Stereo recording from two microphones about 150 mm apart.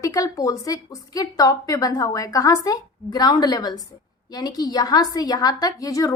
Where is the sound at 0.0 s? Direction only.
20° left (ahead or behind).